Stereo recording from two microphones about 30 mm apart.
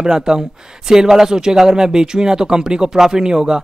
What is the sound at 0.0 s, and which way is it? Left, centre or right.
Speech, right.